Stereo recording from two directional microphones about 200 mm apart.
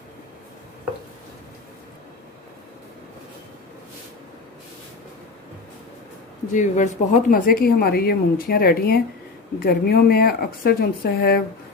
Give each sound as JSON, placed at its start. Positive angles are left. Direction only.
{"t": 6.5, "sound": "a woman's voice", "side_deg": 40}